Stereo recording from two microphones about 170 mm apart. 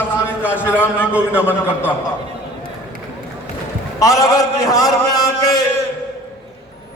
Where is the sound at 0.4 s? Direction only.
10° left (ahead or behind).